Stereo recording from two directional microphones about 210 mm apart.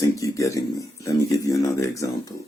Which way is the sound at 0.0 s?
15° left (ahead or behind).